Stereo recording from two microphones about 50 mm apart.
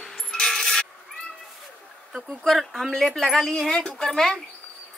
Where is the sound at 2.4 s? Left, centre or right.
Centre.